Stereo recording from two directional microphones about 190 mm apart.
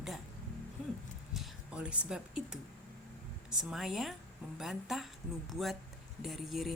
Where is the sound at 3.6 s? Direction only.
Centre (ahead or behind).